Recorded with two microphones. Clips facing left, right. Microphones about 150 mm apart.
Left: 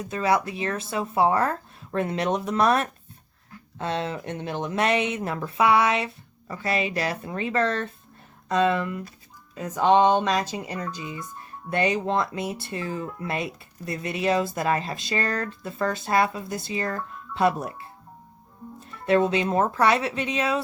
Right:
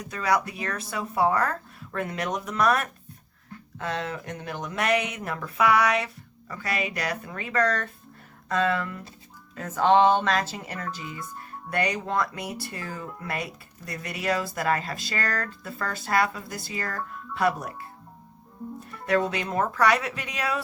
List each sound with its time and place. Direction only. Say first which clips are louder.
0.0 s speech: left 2 dB; 25° left (ahead or behind)
19.0 s speech: left 4 dB; 25° left (ahead or behind)